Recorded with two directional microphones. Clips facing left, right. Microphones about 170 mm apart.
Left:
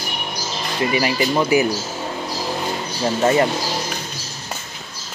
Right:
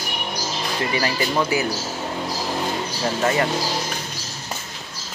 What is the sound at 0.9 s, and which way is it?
Speech, 15° left (ahead or behind).